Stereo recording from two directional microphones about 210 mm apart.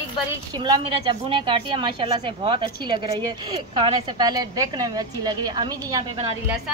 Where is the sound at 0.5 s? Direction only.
20° right (ahead or behind).